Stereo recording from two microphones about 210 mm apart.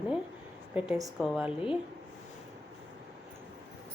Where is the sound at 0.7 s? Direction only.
5° right (ahead or behind).